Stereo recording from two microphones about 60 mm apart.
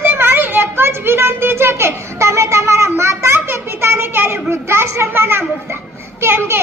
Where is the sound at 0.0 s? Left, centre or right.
Right.